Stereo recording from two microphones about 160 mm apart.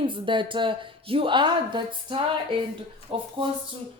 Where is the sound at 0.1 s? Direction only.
30° right (ahead or behind).